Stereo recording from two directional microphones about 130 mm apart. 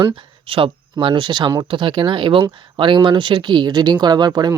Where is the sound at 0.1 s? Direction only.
45° right (ahead or behind).